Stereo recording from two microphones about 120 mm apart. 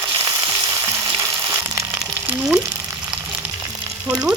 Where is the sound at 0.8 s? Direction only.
25° right (ahead or behind).